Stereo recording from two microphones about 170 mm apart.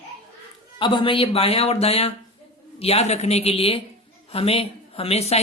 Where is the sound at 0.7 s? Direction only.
30° left (ahead or behind).